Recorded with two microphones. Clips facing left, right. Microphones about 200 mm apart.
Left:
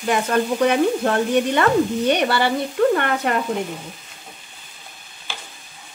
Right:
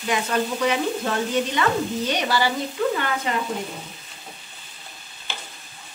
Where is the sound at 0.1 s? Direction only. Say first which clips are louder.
Left 4 dB; 50° left (ahead or behind).